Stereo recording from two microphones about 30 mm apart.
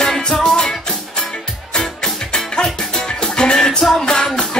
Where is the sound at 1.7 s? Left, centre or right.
Left.